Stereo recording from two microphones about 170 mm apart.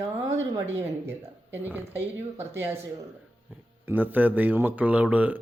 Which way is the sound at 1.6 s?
10° right (ahead or behind).